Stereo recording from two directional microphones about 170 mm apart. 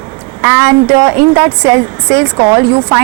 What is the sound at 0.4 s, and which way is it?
Speech, 15° right (ahead or behind).